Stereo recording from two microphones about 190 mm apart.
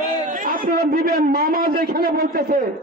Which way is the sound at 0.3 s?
45° right (ahead or behind).